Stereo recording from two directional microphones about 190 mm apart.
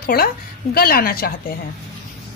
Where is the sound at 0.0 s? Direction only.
50° left (ahead or behind).